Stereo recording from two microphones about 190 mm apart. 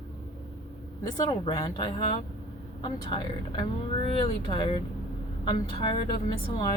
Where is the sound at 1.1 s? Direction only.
20° left (ahead or behind).